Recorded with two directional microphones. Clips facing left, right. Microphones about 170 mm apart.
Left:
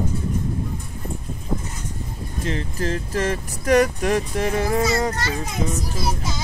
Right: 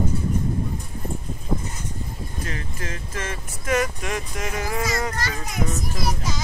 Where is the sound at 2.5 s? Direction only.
30° left (ahead or behind).